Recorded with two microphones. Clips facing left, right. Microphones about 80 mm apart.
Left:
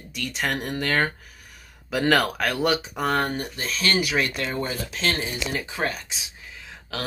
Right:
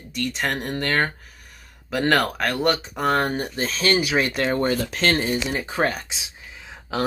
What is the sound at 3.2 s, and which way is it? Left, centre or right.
Speech, right.